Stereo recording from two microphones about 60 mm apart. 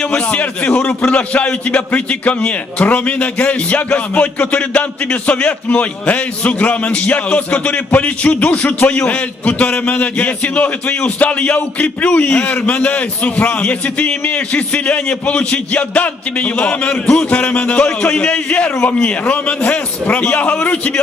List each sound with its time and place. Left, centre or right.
0.0 s a man's voice: left